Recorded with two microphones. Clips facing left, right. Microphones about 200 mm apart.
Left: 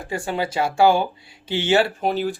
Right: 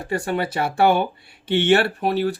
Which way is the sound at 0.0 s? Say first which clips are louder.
Right 2 dB; 65° right (ahead or behind).